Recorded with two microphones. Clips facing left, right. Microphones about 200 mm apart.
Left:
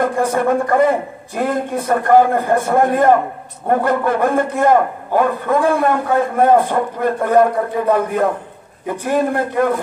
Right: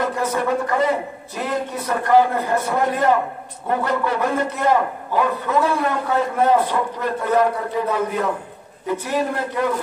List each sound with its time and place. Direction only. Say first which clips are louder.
0.0 s a man's voice: left 5 dB; 50° left (ahead or behind)